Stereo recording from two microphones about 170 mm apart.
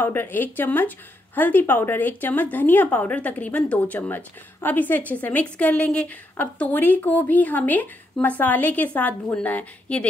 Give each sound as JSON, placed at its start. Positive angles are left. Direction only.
{"t": 0.0, "sound": "speech", "side_deg": 15}